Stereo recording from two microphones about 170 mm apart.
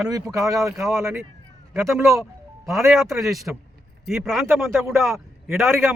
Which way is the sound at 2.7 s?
Centre (ahead or behind).